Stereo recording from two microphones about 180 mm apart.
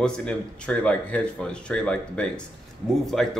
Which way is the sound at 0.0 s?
5° left (ahead or behind).